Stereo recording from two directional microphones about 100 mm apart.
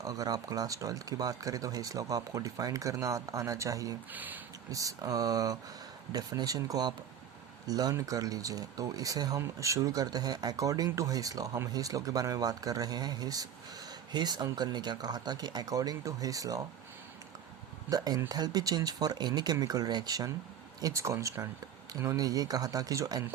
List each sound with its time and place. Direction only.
0.0 s speech: 35° right (ahead or behind)
4.1 s speech: 15° right (ahead or behind)
4.7 s speech: 35° right (ahead or behind)
17.8 s speech: 40° right (ahead or behind)